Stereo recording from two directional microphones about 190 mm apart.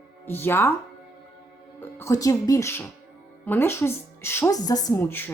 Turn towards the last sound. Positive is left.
turn(degrees=10)  # may be behind; listen again after turning